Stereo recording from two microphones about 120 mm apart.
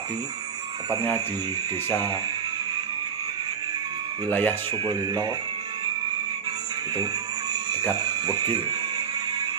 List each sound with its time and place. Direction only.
4.3 s speech: 15° left (ahead or behind)
4.9 s speech: 35° right (ahead or behind)
8.0 s speech: 35° right (ahead or behind)